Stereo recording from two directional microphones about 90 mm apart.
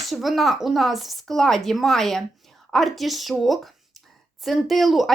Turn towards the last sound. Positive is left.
turn(degrees=0)  # may be behind; listen again after turning